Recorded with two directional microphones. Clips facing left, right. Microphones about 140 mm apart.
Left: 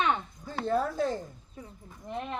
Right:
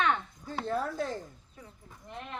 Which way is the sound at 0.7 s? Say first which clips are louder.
Left 5 dB; 25° left (ahead or behind).